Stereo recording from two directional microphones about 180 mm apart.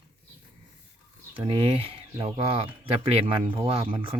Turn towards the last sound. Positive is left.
turn(degrees=-30)  # may be behind; listen again after turning